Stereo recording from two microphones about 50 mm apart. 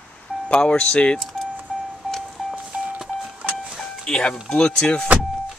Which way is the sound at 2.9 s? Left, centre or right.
Right.